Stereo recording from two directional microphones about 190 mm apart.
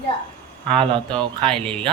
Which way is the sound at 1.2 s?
30° right (ahead or behind).